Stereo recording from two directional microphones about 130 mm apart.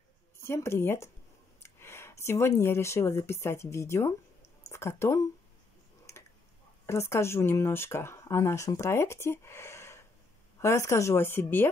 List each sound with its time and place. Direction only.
0.4 s speech: 20° left (ahead or behind)
6.9 s speech: 20° left (ahead or behind)